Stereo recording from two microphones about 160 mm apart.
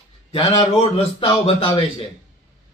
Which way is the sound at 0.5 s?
35° left (ahead or behind).